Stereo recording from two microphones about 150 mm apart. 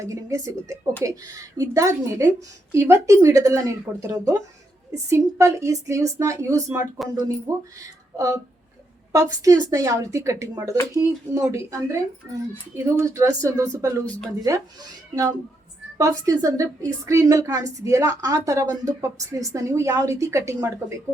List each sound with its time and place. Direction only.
0.0 s a woman's voice: 20° right (ahead or behind)
9.1 s a woman's voice: 25° right (ahead or behind)
14.0 s speech: 10° left (ahead or behind)
14.5 s a woman's voice: 20° right (ahead or behind)